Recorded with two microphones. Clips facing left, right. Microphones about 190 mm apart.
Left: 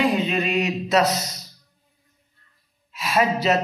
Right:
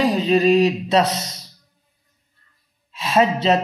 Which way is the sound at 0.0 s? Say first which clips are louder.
Right 5 dB; 35° right (ahead or behind).